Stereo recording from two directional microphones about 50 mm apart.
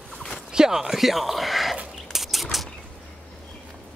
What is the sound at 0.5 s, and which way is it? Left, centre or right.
Speech, centre.